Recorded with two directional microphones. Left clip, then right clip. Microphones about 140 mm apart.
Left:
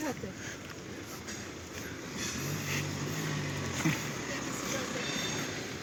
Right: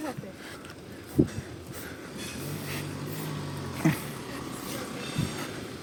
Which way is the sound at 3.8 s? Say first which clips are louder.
Right 6 dB; 45° right (ahead or behind).